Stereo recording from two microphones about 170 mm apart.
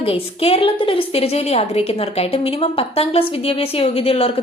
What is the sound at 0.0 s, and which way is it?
A woman's voice, 35° left (ahead or behind).